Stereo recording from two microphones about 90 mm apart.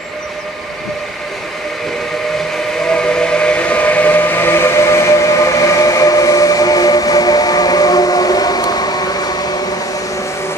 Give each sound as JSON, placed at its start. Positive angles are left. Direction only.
{"t": 2.9, "sound": "steam whistle", "side_deg": 10}